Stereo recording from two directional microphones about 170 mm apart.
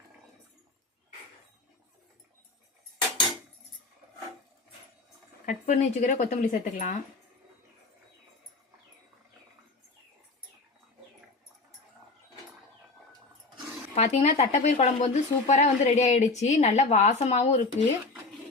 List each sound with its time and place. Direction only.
5.5 s speech: 45° left (ahead or behind)
13.9 s speech: 40° left (ahead or behind)